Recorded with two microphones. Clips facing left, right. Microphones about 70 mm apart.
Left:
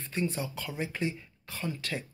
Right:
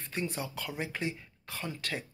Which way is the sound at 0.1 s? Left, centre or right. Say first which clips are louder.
Left 3 dB; right.